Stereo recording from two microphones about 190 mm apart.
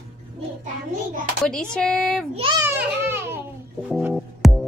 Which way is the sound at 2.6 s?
10° right (ahead or behind).